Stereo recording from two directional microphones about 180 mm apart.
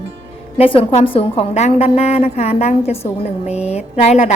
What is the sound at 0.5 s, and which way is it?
A woman's voice, 30° left (ahead or behind).